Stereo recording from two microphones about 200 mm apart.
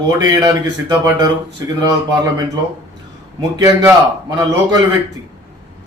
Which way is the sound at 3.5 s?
15° right (ahead or behind).